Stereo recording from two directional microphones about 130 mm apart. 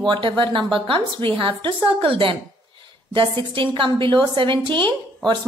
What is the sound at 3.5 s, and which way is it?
A woman's voice, 40° right (ahead or behind).